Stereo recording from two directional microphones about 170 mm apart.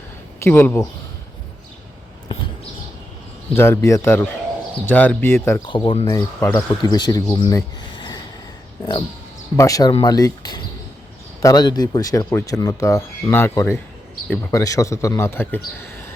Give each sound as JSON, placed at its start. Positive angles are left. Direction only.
{"t": 0.4, "sound": "a man's voice", "side_deg": 10}
{"t": 3.5, "sound": "a man's voice", "side_deg": 15}
{"t": 5.6, "sound": "speech", "side_deg": 30}
{"t": 6.1, "sound": "speech", "side_deg": 20}
{"t": 9.6, "sound": "a man's voice", "side_deg": 20}